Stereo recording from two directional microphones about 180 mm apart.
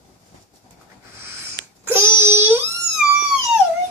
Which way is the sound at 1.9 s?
15° right (ahead or behind).